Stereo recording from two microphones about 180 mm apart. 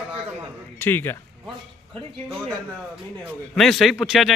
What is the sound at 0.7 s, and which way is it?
Speech, 10° left (ahead or behind).